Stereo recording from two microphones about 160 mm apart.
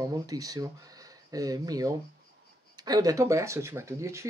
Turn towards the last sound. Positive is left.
turn(degrees=-20)  # may be behind; listen again after turning